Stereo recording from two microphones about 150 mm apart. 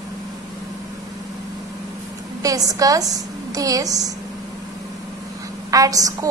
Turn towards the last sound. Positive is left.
turn(degrees=-25)  # may be behind; listen again after turning